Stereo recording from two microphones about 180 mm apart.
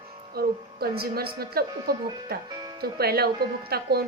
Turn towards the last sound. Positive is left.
turn(degrees=-60)  # may be behind; listen again after turning